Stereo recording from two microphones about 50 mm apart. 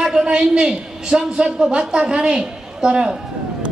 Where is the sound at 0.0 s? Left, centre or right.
Centre.